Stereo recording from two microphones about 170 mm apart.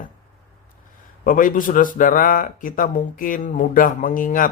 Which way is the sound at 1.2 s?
55° left (ahead or behind).